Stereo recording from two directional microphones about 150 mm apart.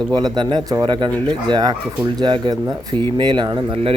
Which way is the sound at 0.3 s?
25° right (ahead or behind).